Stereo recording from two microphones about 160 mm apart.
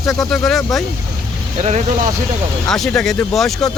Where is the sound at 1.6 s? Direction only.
45° right (ahead or behind).